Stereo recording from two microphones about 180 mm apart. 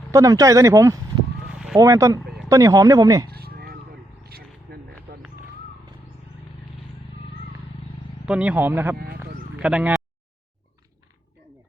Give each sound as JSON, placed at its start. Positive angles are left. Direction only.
{"t": 0.1, "sound": "speech", "side_deg": -20}
{"t": 3.3, "sound": "a sound", "side_deg": -60}
{"t": 8.3, "sound": "speech", "side_deg": -5}